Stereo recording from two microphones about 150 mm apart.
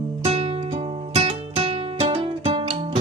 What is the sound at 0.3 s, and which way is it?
Music, 40° right (ahead or behind).